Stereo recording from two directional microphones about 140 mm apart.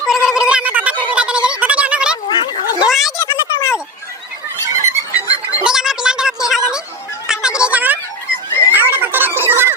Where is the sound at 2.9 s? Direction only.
5° right (ahead or behind).